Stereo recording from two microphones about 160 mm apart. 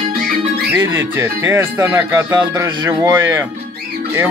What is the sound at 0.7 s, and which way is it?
Speech, 15° right (ahead or behind).